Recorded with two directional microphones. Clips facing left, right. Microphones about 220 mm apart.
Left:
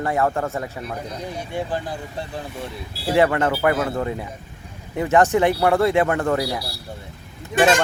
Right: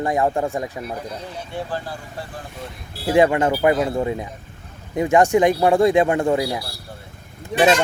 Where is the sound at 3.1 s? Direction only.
15° right (ahead or behind).